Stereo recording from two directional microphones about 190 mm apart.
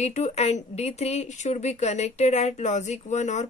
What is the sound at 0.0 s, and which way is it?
Speech, 35° left (ahead or behind).